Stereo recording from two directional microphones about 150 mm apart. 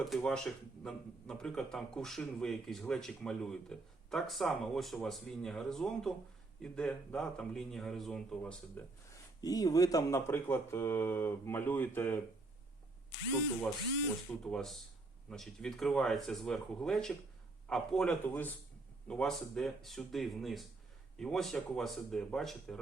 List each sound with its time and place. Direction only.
0.0 s a man's voice: 5° left (ahead or behind)
9.4 s speech: 25° left (ahead or behind)
14.3 s a man's voice: 5° left (ahead or behind)